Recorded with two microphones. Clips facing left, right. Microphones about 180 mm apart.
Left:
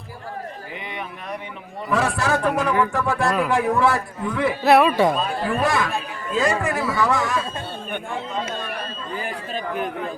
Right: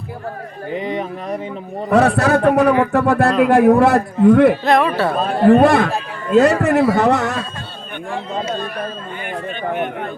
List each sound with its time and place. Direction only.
0.8 s speech: 40° right (ahead or behind)
1.9 s a man's voice: 65° right (ahead or behind)
4.6 s speech: 10° left (ahead or behind)
5.1 s a man's voice: 65° right (ahead or behind)
9.6 s a sound: 60° right (ahead or behind)